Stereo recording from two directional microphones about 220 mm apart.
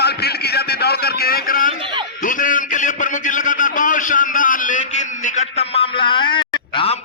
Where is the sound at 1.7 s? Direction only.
25° right (ahead or behind).